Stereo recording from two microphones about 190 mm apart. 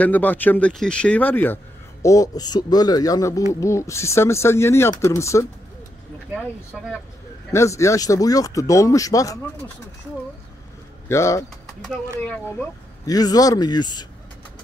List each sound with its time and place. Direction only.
0.0 s a man's voice: 10° left (ahead or behind)
6.3 s speech: 5° right (ahead or behind)
7.5 s a man's voice: 15° left (ahead or behind)
11.1 s a man's voice: 15° left (ahead or behind)
13.0 s speech: 20° left (ahead or behind)